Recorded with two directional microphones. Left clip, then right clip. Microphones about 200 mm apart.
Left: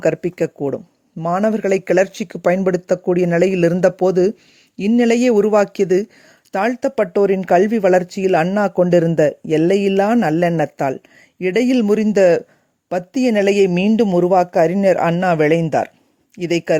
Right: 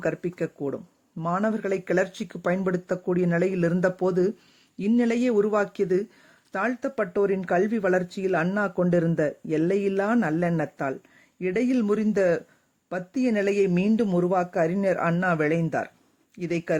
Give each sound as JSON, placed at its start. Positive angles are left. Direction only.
{"t": 0.0, "sound": "speech", "side_deg": 40}